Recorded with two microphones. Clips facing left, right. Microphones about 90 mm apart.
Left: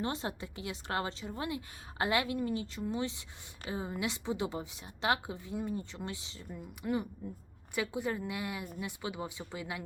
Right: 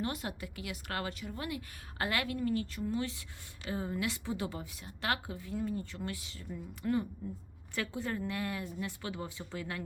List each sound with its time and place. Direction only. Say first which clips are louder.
0.0 s a woman's voice: left 1 dB; 25° left (ahead or behind)